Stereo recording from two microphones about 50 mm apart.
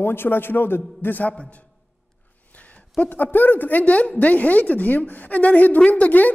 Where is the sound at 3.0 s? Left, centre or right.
Left.